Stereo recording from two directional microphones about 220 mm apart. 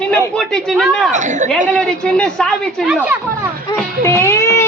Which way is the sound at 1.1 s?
35° right (ahead or behind).